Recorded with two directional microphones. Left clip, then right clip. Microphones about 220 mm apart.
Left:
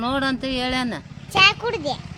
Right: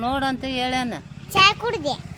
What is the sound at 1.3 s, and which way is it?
Speech, 5° right (ahead or behind).